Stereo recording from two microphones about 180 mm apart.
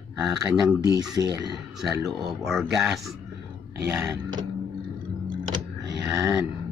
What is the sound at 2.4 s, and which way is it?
Speech, centre (ahead or behind).